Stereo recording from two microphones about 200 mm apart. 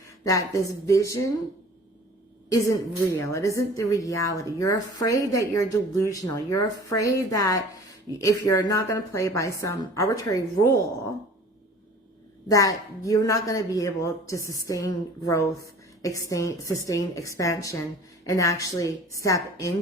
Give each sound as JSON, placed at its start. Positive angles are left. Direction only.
{"t": 0.3, "sound": "a woman's voice", "side_deg": 15}
{"t": 2.5, "sound": "a woman's voice", "side_deg": 15}
{"t": 12.5, "sound": "a woman's voice", "side_deg": 15}